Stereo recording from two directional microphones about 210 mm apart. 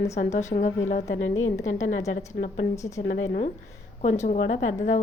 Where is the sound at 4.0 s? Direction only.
35° left (ahead or behind).